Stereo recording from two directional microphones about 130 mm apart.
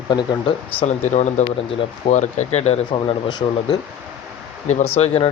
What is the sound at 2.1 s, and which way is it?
Speech, 65° left (ahead or behind).